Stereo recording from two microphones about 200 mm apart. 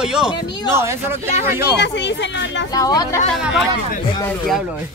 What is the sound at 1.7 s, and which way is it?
Speech, 60° left (ahead or behind).